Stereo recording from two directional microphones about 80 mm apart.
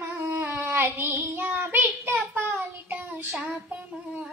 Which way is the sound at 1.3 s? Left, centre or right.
Right.